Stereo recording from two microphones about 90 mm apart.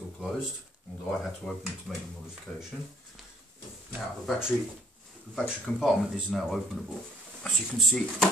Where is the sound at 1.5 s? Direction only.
5° left (ahead or behind).